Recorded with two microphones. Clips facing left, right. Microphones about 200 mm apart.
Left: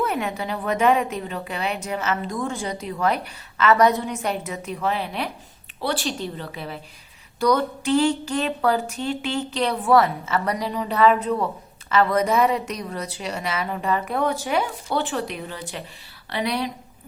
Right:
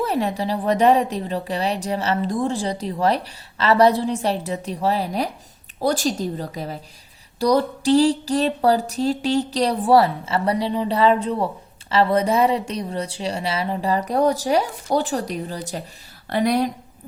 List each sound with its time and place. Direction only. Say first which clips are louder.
0.0 s speech: right 3 dB; 35° right (ahead or behind)